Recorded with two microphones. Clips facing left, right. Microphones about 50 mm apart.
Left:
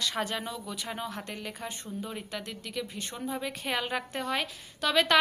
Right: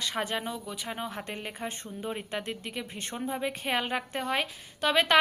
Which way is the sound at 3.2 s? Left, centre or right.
Right.